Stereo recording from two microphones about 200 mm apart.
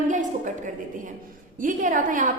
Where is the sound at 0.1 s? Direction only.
40° right (ahead or behind).